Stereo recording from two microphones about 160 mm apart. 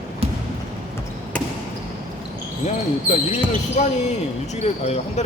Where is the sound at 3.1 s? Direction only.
45° left (ahead or behind).